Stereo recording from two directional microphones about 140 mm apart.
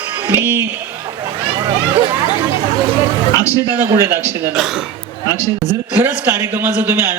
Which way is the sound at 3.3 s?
25° left (ahead or behind).